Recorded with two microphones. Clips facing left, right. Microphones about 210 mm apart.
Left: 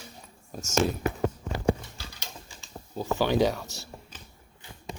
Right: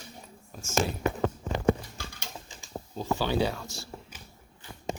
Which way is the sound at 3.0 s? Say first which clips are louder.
Left 3 dB; 15° left (ahead or behind).